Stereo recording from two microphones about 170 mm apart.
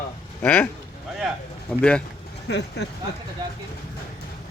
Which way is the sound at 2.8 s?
80° left.